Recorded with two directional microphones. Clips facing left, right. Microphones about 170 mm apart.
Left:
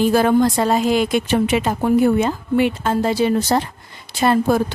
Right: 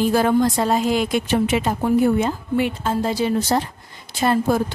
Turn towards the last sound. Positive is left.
turn(degrees=70)  # may be behind; listen again after turning